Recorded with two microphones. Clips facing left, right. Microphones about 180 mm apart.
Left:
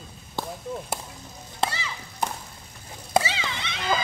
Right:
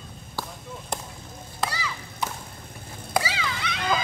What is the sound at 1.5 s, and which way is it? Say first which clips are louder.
Chop: left 1 dB; 25° left (ahead or behind).